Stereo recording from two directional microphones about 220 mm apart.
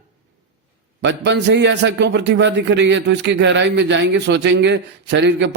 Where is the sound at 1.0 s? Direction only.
50° right (ahead or behind).